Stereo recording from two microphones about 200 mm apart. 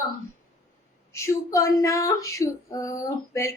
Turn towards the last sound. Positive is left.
turn(degrees=15)  # may be behind; listen again after turning